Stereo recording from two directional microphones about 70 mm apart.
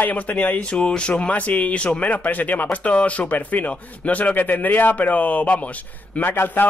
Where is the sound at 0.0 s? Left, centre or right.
Left.